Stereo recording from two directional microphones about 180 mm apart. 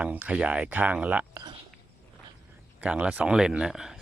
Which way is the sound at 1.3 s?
25° right (ahead or behind).